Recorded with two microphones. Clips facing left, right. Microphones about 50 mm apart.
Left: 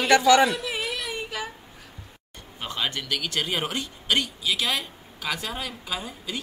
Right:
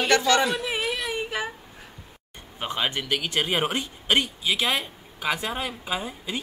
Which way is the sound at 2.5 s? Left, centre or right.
Right.